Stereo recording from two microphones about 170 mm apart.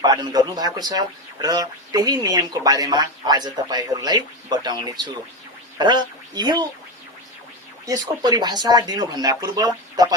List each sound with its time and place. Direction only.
0.0 s speech: 25° right (ahead or behind)
7.9 s speech: 20° right (ahead or behind)